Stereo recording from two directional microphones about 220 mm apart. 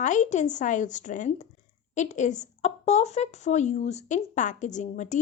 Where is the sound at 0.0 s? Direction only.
35° left (ahead or behind).